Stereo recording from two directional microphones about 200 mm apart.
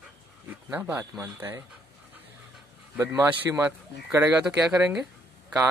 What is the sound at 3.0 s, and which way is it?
Speech, 15° right (ahead or behind).